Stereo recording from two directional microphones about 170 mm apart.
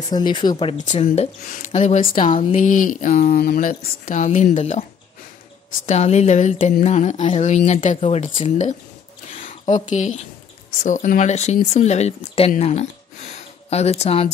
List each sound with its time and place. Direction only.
0.1 s speech: 25° left (ahead or behind)
0.7 s speech: 45° left (ahead or behind)
5.9 s speech: 40° left (ahead or behind)
9.3 s a sound: 45° left (ahead or behind)
10.8 s speech: 50° left (ahead or behind)